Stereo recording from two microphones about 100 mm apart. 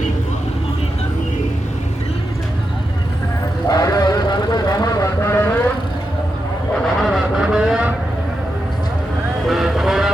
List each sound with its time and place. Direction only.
3.7 s vehicle: 40° left (ahead or behind); by 5.6 s 20° left (ahead or behind)
7.0 s vehicle: 5° right (ahead or behind)
9.5 s vehicle: 5° right (ahead or behind)